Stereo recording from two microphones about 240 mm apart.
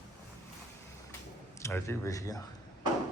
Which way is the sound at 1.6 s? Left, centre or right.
Centre.